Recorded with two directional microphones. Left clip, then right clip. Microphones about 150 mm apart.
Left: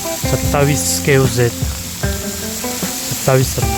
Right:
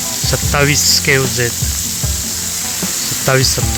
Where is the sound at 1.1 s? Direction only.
20° left (ahead or behind).